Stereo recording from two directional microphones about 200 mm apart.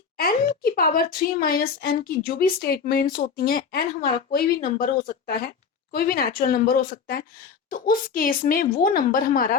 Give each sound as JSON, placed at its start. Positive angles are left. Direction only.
{"t": 0.2, "sound": "a woman's voice", "side_deg": 45}